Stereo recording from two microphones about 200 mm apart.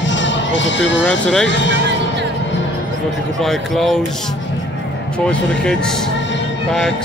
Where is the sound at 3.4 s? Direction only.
Centre (ahead or behind).